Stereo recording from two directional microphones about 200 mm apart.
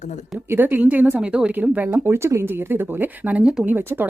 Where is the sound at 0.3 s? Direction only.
10° right (ahead or behind).